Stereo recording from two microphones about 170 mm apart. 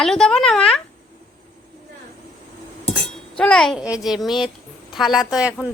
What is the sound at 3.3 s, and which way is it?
A child's voice, 5° left (ahead or behind).